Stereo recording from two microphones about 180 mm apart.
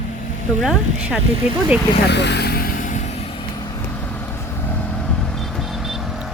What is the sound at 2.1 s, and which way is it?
Vehicle, 70° left (ahead or behind).